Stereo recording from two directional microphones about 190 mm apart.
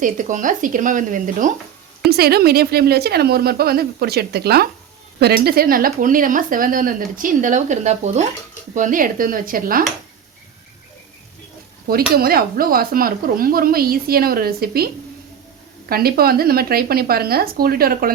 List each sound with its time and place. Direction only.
0.0 s speech: 45° right (ahead or behind)
2.0 s a woman's voice: 55° right (ahead or behind)
12.1 s speech: 50° right (ahead or behind)
15.9 s speech: 55° right (ahead or behind)